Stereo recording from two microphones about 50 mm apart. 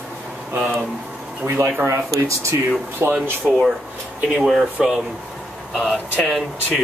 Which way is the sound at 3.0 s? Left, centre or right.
Right.